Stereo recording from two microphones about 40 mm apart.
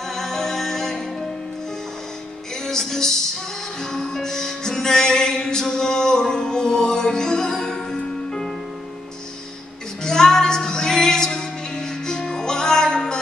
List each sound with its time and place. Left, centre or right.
0.1 s music: centre
2.6 s music: centre
10.0 s music: centre